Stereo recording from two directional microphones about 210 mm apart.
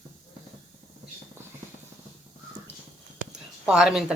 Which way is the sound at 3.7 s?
5° right (ahead or behind).